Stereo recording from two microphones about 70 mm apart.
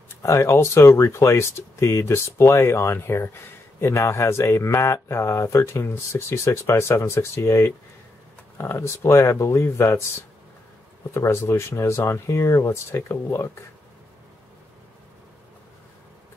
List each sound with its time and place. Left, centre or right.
0.1 s speech: left
11.1 s speech: left